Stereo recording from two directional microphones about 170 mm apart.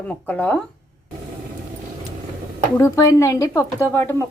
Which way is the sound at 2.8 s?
20° left (ahead or behind).